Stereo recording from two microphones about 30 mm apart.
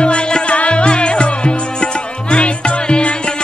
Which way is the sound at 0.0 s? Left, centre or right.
Left.